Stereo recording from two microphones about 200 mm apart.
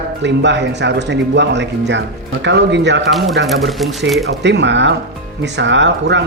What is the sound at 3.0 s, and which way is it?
Speech, centre (ahead or behind).